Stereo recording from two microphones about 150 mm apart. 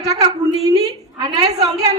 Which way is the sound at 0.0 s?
25° right (ahead or behind).